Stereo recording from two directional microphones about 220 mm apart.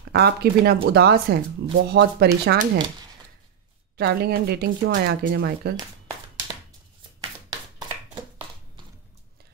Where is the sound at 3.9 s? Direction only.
45° right (ahead or behind).